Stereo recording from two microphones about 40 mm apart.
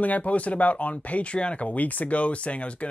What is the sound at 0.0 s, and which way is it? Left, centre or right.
Speech, left.